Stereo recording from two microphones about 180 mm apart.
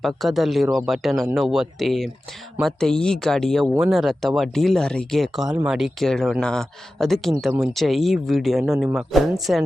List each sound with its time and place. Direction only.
0.0 s speech: centre (ahead or behind)